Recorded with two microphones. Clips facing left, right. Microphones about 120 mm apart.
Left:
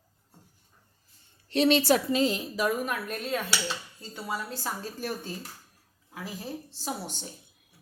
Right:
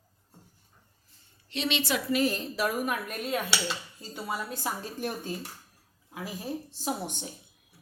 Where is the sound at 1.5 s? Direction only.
40° left (ahead or behind).